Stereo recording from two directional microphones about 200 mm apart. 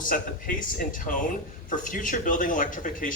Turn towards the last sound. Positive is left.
turn(degrees=40)  # may be behind; listen again after turning